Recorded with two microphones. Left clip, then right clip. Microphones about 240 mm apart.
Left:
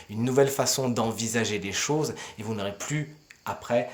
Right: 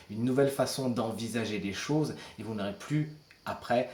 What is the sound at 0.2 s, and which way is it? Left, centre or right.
Speech, left.